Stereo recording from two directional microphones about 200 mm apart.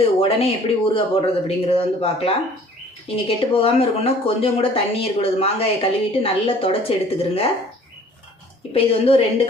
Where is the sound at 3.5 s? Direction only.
30° left (ahead or behind).